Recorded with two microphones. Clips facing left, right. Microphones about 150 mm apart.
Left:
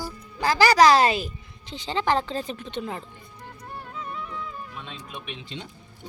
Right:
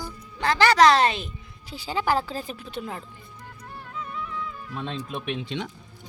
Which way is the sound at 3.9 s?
30° left (ahead or behind).